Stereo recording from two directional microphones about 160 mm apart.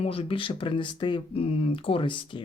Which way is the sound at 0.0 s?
35° left (ahead or behind).